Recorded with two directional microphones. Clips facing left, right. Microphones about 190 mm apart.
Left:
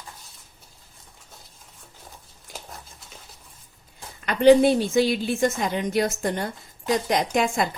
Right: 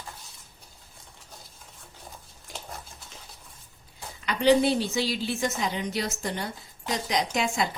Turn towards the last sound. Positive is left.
turn(degrees=55)  # may be behind; listen again after turning